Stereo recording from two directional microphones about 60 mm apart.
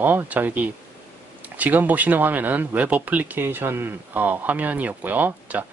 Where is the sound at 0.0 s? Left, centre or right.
Right.